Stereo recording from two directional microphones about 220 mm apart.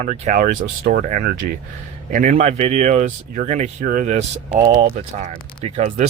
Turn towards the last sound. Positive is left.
turn(degrees=-30)  # may be behind; listen again after turning